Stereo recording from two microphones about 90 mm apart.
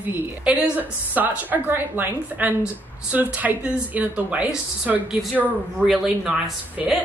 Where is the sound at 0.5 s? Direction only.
20° right (ahead or behind).